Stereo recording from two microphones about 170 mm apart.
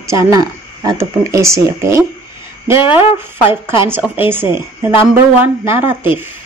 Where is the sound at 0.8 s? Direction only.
20° right (ahead or behind).